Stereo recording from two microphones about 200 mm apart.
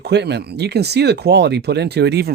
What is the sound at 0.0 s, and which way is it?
Speech, 55° right (ahead or behind).